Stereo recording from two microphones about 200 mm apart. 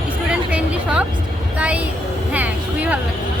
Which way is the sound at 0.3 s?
5° right (ahead or behind).